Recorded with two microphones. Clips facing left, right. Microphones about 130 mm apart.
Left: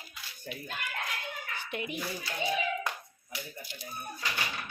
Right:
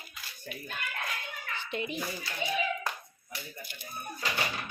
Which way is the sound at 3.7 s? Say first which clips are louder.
Left 3 dB; 55° right (ahead or behind).